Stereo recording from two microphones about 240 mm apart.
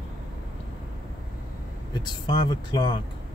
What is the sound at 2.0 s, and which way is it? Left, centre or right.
Speech, centre.